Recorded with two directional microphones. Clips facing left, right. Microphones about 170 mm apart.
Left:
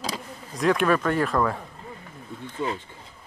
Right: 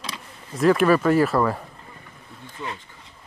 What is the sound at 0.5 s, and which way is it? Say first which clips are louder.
Speech: right 4 dB; 5° right (ahead or behind).